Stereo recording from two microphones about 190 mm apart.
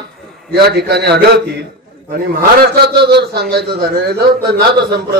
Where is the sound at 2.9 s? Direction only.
60° right (ahead or behind).